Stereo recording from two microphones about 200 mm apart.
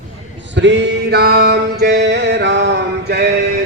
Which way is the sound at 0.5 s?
60° right (ahead or behind).